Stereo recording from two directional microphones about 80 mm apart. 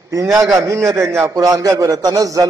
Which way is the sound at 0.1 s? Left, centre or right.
Right.